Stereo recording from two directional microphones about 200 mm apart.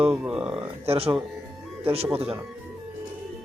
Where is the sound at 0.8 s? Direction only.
30° right (ahead or behind).